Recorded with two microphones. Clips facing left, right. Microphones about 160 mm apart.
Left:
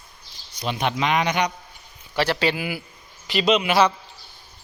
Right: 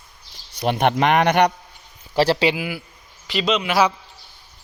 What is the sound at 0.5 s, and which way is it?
Speech, 60° right (ahead or behind).